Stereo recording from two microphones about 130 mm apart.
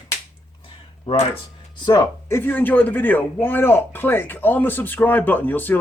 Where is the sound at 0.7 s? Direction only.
40° left (ahead or behind).